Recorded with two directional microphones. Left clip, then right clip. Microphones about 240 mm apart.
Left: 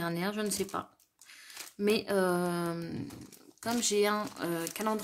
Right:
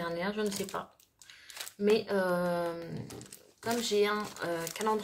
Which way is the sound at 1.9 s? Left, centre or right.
Left.